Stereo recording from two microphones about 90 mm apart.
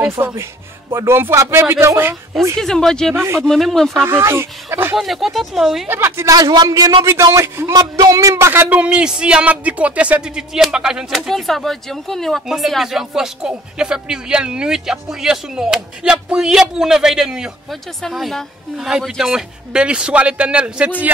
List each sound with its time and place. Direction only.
0.2 s a man's voice: 35° right (ahead or behind)
2.5 s speech: 5° left (ahead or behind)
3.2 s speech: 30° right (ahead or behind)
3.4 s speech: centre (ahead or behind)
4.0 s speech: 30° right (ahead or behind)
4.9 s speech: centre (ahead or behind)
5.9 s speech: 25° right (ahead or behind)
6.3 s a man's voice: 45° right (ahead or behind)
7.3 s a man's voice: 30° right (ahead or behind); by 20.9 s 15° right (ahead or behind)